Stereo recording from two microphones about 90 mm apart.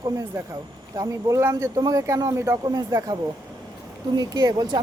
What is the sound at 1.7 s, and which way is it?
Speech, 45° right (ahead or behind).